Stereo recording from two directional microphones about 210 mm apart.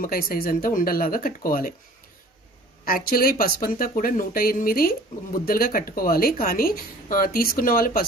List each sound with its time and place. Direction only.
0.0 s speech: 45° left (ahead or behind)
2.8 s speech: 45° left (ahead or behind)